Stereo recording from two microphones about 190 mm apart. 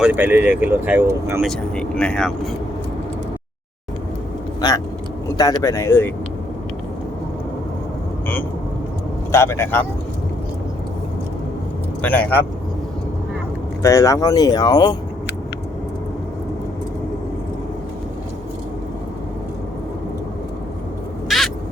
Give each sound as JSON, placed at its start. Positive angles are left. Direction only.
{"t": 0.0, "sound": "speech", "side_deg": -10}
{"t": 1.5, "sound": "speech", "side_deg": 5}
{"t": 4.6, "sound": "speech", "side_deg": 20}
{"t": 9.3, "sound": "speech", "side_deg": 15}
{"t": 12.0, "sound": "speech", "side_deg": 10}
{"t": 13.8, "sound": "speech", "side_deg": 15}
{"t": 21.2, "sound": "a sound", "side_deg": 0}